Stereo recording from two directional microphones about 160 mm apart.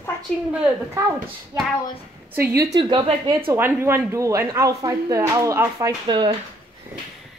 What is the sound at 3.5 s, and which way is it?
Speech, 15° right (ahead or behind).